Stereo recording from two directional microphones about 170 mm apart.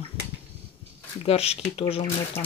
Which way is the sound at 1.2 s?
35° left (ahead or behind).